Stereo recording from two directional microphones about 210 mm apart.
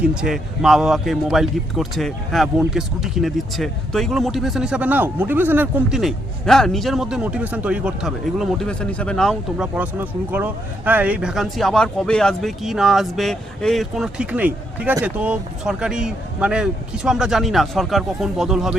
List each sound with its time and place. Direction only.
0.0 s speech: 5° right (ahead or behind)